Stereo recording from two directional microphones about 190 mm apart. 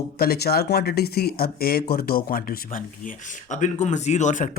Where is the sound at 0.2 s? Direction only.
55° left (ahead or behind).